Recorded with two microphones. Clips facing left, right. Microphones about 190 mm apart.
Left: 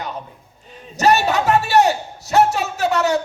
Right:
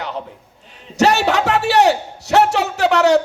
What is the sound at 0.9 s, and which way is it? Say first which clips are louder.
A man's voice: right 1 dB; 70° right (ahead or behind).